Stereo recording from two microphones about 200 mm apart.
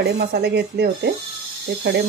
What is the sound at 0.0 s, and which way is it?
Speech, 55° right (ahead or behind).